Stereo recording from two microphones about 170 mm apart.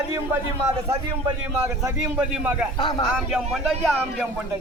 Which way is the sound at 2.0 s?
5° right (ahead or behind).